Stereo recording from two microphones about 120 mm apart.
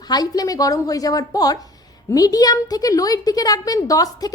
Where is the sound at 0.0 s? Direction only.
35° left (ahead or behind).